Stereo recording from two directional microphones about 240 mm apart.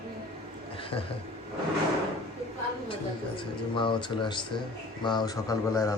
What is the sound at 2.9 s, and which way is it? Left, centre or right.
Speech, left.